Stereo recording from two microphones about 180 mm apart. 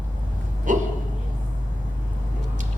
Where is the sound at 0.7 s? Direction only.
45° right (ahead or behind).